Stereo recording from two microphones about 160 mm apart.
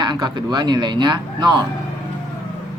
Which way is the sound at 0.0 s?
25° right (ahead or behind).